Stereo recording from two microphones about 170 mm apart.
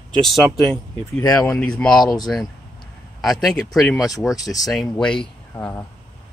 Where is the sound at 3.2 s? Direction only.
Centre (ahead or behind).